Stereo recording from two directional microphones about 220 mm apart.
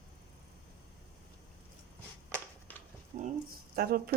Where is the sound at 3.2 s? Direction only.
40° right (ahead or behind).